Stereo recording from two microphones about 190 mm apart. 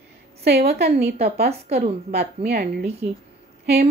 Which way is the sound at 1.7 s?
35° right (ahead or behind).